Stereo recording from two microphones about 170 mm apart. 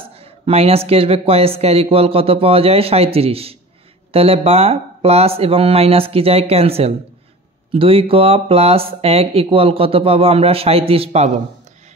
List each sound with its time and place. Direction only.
0.1 s speech: 35° right (ahead or behind)